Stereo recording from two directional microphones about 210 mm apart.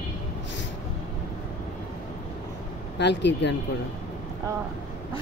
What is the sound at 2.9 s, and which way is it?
Speech, 55° left (ahead or behind).